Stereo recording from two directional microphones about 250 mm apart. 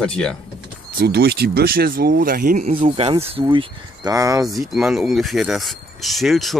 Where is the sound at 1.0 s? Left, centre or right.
Right; by 4.4 s centre.